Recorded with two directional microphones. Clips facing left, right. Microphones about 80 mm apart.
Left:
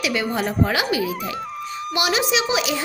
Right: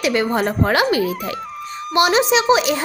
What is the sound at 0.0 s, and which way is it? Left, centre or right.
Speech, right.